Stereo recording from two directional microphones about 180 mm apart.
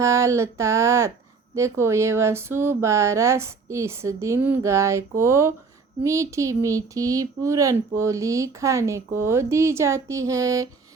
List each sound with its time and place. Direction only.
0.0 s speech: 15° right (ahead or behind)